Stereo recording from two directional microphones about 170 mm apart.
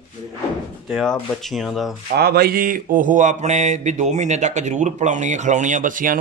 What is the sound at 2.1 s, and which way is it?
Mantra, 65° right (ahead or behind).